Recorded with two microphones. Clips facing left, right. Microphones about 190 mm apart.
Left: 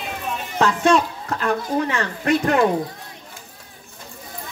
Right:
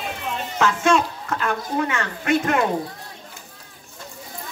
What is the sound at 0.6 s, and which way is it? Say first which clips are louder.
A woman's voice: left 2 dB; 35° left (ahead or behind).